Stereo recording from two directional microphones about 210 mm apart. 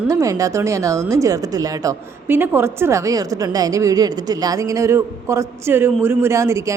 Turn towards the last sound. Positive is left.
turn(degrees=-15)  # may be behind; listen again after turning